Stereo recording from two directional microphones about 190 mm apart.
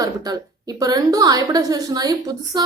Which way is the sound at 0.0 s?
20° right (ahead or behind).